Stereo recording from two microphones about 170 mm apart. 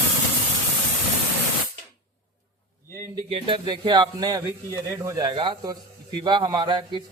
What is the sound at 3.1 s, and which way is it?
A man's voice, 30° right (ahead or behind).